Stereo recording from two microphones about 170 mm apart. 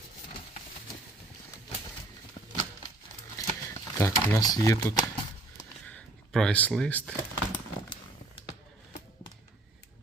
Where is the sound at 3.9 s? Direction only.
20° left (ahead or behind).